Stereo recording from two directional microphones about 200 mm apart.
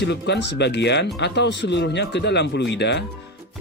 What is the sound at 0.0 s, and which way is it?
Speech, 60° left (ahead or behind).